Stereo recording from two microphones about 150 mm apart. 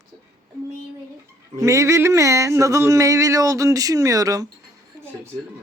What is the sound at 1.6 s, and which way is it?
Speech, 20° right (ahead or behind).